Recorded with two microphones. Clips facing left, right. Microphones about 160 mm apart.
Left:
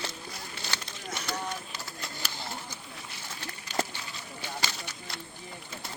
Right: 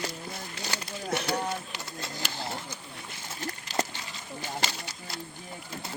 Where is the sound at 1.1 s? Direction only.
60° right (ahead or behind).